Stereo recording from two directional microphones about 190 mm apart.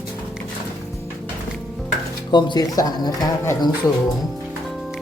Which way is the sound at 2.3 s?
20° left (ahead or behind).